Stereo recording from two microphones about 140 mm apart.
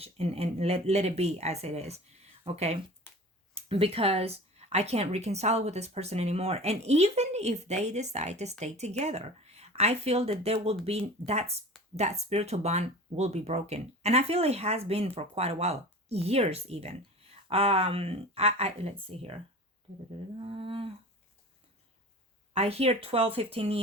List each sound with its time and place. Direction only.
0.0 s speech: 45° right (ahead or behind)
20.4 s humming: 40° right (ahead or behind)
22.5 s speech: 45° right (ahead or behind)